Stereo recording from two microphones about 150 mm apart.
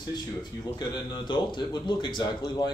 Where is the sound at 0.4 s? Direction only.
30° left (ahead or behind).